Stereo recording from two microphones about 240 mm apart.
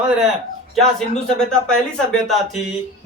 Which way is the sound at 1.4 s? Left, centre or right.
Centre.